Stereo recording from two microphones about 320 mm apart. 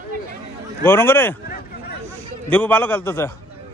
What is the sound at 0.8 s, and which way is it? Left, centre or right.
Speech, centre.